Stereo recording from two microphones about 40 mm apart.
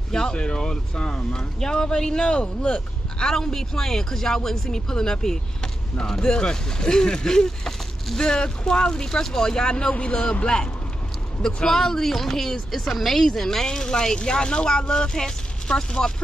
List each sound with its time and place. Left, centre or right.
0.1 s speech: centre